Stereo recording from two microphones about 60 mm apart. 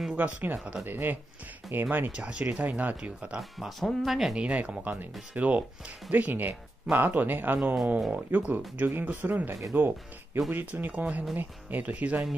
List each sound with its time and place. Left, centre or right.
0.1 s speech: right
2.1 s speech: centre
3.0 s speech: centre
3.3 s speech: centre
4.4 s speech: right